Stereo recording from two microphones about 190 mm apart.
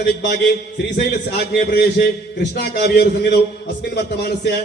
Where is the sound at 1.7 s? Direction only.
60° left (ahead or behind).